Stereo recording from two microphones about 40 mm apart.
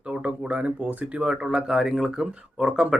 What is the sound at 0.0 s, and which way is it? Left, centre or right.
Speech, right.